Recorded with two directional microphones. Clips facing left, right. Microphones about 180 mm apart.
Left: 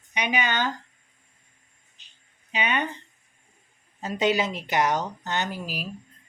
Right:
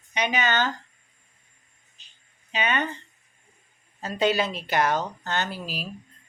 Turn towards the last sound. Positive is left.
turn(degrees=15)  # may be behind; listen again after turning